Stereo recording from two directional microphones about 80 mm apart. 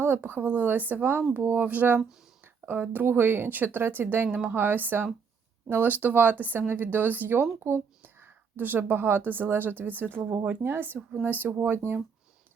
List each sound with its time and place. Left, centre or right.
0.0 s speech: right